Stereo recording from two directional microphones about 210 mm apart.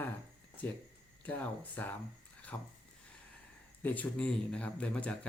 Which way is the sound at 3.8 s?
10° left (ahead or behind).